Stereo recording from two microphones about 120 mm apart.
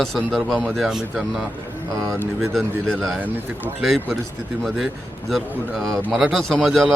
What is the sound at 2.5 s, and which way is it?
Speech, centre (ahead or behind).